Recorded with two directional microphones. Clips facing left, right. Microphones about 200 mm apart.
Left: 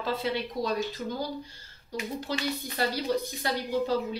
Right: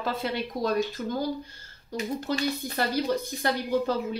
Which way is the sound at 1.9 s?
45° right (ahead or behind).